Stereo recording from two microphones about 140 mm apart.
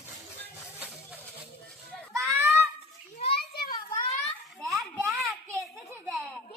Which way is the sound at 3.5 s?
90° left.